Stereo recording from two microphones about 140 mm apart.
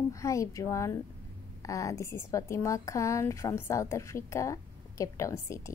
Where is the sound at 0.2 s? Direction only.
20° left (ahead or behind).